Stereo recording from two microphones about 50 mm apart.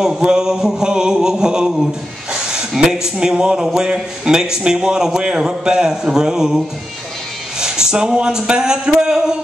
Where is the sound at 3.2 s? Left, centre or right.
Centre.